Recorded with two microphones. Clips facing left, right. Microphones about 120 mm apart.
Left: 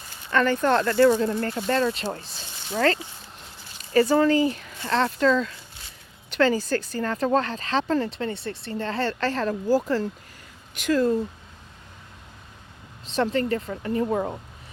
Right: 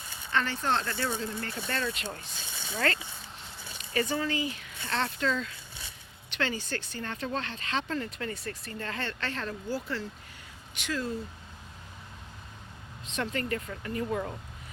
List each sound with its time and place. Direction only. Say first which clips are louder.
0.3 s speech: left 8 dB; 50° left (ahead or behind)
1.9 s speech: left 8 dB; 30° left (ahead or behind)
3.8 s zipper: left 11 dB; 40° left (ahead or behind)
4.2 s speech: left 12 dB; 40° left (ahead or behind)
13.1 s speech: left 9 dB; 35° left (ahead or behind)